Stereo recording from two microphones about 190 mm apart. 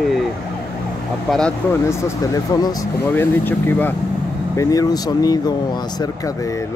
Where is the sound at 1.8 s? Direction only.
15° left (ahead or behind).